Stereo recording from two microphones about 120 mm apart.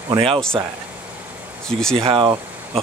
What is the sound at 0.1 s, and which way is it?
Speech, 45° right (ahead or behind).